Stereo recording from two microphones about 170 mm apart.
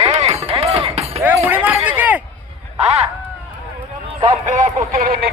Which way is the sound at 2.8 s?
40° right (ahead or behind).